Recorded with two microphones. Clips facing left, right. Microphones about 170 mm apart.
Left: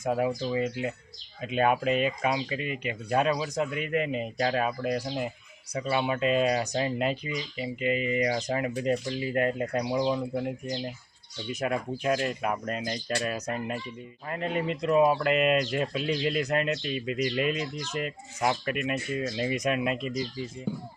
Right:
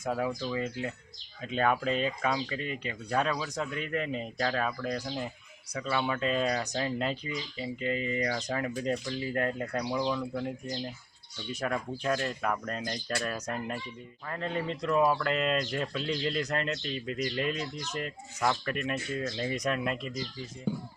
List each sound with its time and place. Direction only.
0.0 s speech: 20° left (ahead or behind)